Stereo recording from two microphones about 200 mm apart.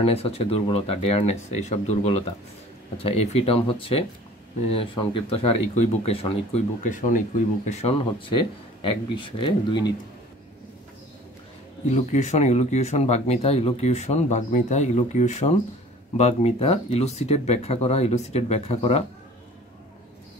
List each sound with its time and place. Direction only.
0.0 s speech: 30° left (ahead or behind)
11.8 s speech: 35° left (ahead or behind)